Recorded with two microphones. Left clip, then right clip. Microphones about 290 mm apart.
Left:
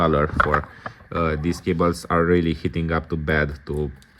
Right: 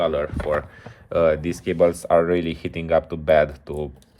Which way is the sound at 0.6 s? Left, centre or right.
Centre.